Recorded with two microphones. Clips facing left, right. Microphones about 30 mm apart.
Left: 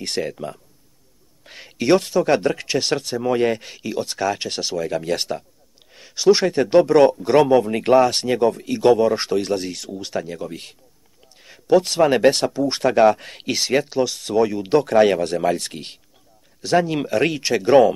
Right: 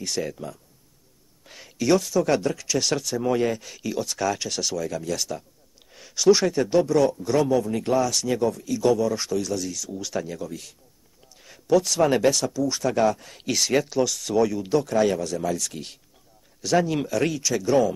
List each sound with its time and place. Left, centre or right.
0.2 s speech: left
1.4 s a sound: left
2.4 s speech: left
2.8 s speech: left
3.3 s speech: left
3.7 s speech: left
5.9 s speech: left
10.0 s speech: left
11.4 s a sound: left
12.2 s speech: left
13.5 s speech: left
14.7 s speech: left
16.6 s speech: left
17.2 s speech: left